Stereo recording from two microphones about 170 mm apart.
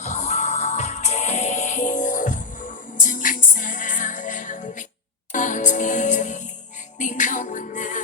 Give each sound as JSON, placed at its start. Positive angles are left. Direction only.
{"t": 0.0, "sound": "music", "side_deg": 45}